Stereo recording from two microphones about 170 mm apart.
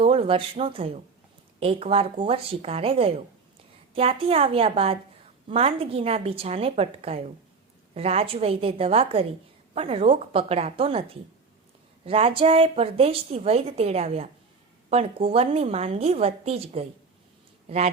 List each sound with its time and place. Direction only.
0.0 s a woman's voice: 35° right (ahead or behind)